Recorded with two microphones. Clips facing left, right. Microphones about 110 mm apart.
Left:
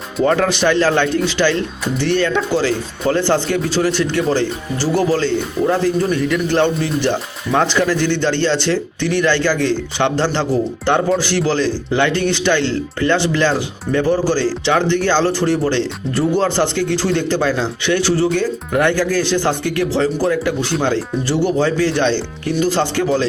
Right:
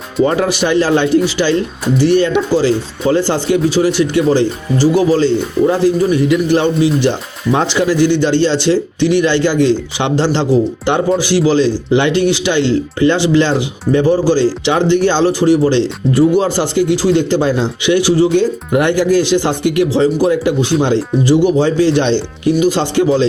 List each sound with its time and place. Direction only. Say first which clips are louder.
0.3 s speech: left 3 dB; 10° right (ahead or behind)